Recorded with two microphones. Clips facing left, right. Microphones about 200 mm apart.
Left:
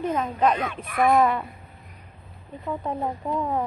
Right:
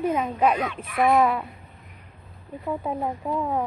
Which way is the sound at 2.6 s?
5° right (ahead or behind).